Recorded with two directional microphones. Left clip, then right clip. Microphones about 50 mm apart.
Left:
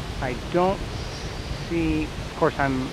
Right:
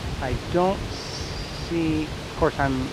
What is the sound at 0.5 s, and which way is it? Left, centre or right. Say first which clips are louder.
Speech: even; right.